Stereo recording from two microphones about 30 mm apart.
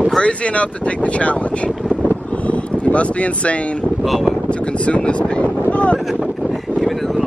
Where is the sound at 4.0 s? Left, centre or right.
Centre.